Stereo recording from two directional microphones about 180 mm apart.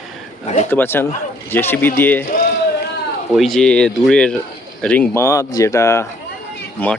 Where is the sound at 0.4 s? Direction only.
40° left (ahead or behind).